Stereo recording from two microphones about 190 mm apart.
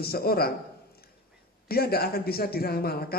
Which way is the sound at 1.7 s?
55° left (ahead or behind).